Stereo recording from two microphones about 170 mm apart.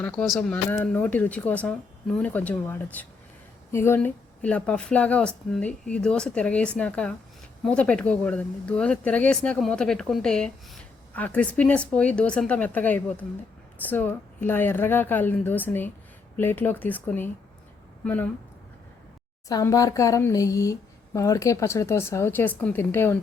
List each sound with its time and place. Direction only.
0.0 s speech: 5° left (ahead or behind)
19.5 s speech: 20° left (ahead or behind)